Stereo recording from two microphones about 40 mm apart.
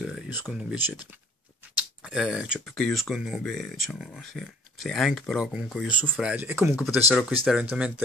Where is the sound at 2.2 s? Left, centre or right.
Right.